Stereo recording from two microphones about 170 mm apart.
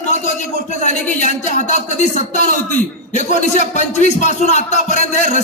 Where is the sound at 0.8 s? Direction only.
45° left (ahead or behind).